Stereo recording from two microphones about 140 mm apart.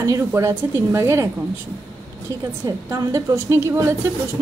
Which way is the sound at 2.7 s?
25° right (ahead or behind).